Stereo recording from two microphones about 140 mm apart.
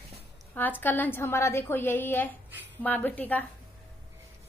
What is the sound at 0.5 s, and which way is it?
A woman's voice, 15° left (ahead or behind).